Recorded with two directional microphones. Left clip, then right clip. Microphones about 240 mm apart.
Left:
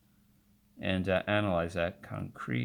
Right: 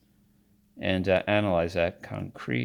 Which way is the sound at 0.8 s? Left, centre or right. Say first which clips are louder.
Right 6 dB; right.